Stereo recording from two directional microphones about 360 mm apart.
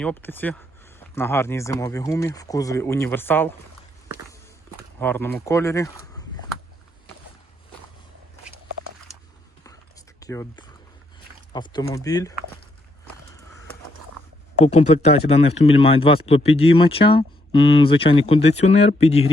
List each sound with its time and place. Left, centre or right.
0.0 s speech: centre
4.9 s speech: centre
10.2 s speech: centre
14.6 s speech: centre